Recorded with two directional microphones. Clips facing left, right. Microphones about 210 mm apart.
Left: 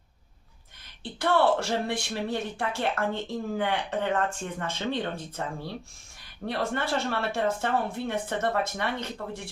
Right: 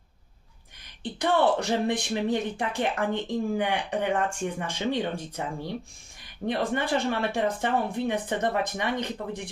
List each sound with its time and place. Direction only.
1.0 s speech: 15° right (ahead or behind)